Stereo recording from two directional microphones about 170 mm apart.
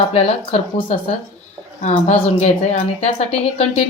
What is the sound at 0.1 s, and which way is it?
A woman's voice, 35° left (ahead or behind).